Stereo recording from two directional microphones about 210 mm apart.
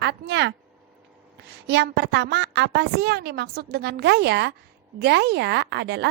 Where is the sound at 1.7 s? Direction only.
55° right (ahead or behind).